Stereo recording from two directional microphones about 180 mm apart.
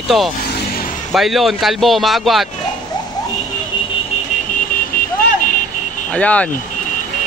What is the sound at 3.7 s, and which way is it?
Vehicle, 25° left (ahead or behind).